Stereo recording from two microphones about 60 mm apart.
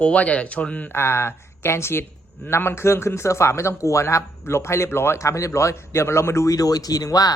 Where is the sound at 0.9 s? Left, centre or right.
Left.